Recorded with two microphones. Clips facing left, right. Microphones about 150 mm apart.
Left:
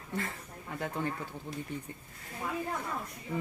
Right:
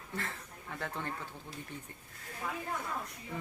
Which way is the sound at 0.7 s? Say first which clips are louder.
Left 5 dB; 15° left (ahead or behind).